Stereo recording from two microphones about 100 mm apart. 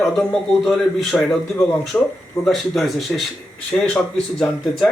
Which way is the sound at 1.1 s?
Centre (ahead or behind).